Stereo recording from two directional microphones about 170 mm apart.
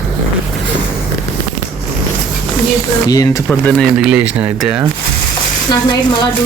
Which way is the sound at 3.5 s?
5° left (ahead or behind).